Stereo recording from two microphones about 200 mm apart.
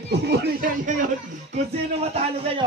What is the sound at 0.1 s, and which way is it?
Speech, 55° right (ahead or behind).